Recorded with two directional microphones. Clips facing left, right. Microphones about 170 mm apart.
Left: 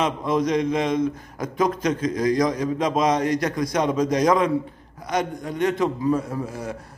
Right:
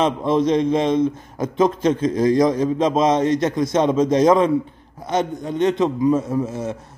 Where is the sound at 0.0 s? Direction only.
30° right (ahead or behind).